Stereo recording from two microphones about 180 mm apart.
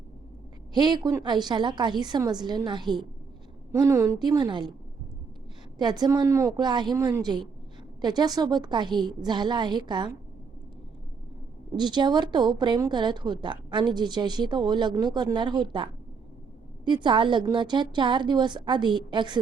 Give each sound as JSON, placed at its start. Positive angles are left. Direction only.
{"t": 0.7, "sound": "a woman's voice", "side_deg": -25}
{"t": 5.8, "sound": "a woman's voice", "side_deg": -25}
{"t": 11.8, "sound": "a woman's voice", "side_deg": -25}